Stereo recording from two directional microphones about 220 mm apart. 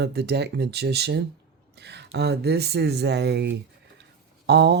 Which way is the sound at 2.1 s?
50° right (ahead or behind).